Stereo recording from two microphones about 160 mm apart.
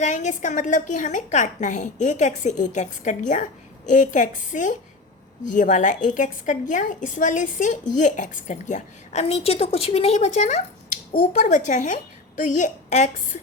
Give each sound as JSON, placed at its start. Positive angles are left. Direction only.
{"t": 0.0, "sound": "a woman's voice", "side_deg": 50}